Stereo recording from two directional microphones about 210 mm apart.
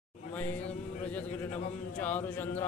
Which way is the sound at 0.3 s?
5° left (ahead or behind).